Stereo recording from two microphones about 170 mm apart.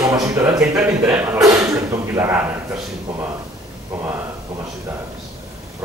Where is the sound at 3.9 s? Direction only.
5° right (ahead or behind).